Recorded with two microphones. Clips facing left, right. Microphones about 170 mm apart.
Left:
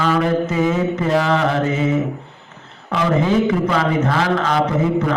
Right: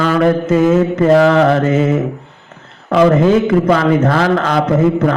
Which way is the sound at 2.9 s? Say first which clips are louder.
Right 7 dB; 50° right (ahead or behind).